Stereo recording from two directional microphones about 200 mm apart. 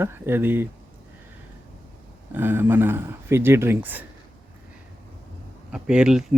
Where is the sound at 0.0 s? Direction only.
10° right (ahead or behind).